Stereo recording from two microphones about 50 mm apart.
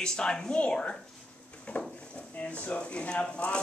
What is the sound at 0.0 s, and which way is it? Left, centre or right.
Speech, centre.